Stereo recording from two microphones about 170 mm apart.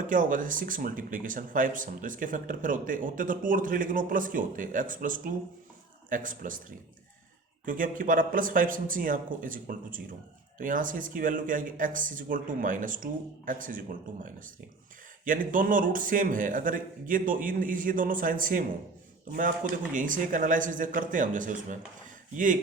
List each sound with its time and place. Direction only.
0.0 s speech: 50° right (ahead or behind)